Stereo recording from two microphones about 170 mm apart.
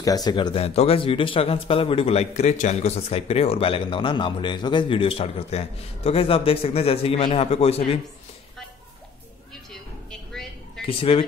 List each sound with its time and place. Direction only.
0.0 s speech: 20° left (ahead or behind)
10.9 s speech: 35° left (ahead or behind)